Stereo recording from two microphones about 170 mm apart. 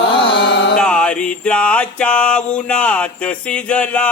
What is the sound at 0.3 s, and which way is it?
Carnatic music, 90° left.